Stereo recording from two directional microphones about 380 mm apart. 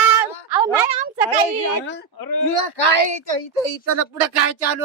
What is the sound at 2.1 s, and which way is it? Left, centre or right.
Speech, left.